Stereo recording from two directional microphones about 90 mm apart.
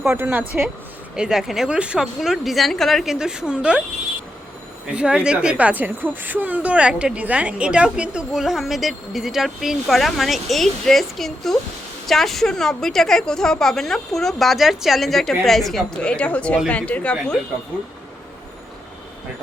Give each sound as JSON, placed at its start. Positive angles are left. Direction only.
{"t": 0.0, "sound": "speech", "side_deg": -25}
{"t": 1.1, "sound": "a woman's voice", "side_deg": -5}
{"t": 4.9, "sound": "a woman's voice", "side_deg": -10}